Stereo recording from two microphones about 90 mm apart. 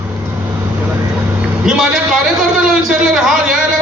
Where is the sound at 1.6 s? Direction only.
5° right (ahead or behind).